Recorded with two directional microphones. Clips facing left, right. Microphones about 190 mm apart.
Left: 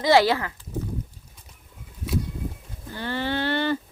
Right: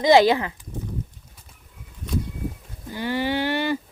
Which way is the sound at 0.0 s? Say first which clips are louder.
Right 3 dB; 20° right (ahead or behind).